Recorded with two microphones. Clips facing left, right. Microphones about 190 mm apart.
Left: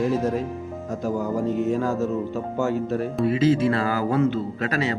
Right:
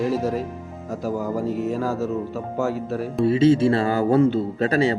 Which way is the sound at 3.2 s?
30° right (ahead or behind).